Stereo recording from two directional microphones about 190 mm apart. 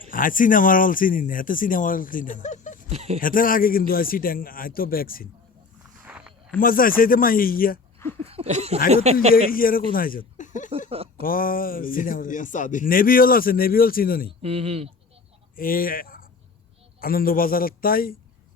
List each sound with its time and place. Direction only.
0.1 s a man's voice: 45° left (ahead or behind)
2.9 s speech: 35° right (ahead or behind)
3.2 s a man's voice: 45° left (ahead or behind)
6.1 s a sound: 5° right (ahead or behind)
6.6 s a man's voice: 50° left (ahead or behind)
8.2 s speech: 30° right (ahead or behind)
9.5 s a man's voice: 50° left (ahead or behind)
10.7 s speech: 30° right (ahead or behind)
11.2 s a man's voice: 50° left (ahead or behind)
14.4 s speech: 30° right (ahead or behind)
15.5 s a man's voice: 50° left (ahead or behind)